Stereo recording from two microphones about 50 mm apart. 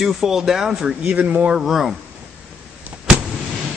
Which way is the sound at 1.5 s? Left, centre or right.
Centre.